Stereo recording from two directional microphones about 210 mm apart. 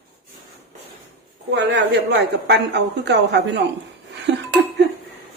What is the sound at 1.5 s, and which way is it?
Speech, 55° right (ahead or behind).